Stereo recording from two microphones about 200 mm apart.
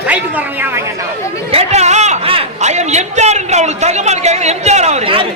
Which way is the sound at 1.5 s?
30° right (ahead or behind).